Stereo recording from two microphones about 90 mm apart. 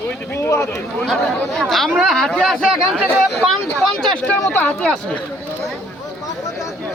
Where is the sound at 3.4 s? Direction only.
Centre (ahead or behind).